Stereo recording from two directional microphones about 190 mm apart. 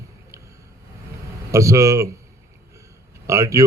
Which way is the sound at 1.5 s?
15° right (ahead or behind).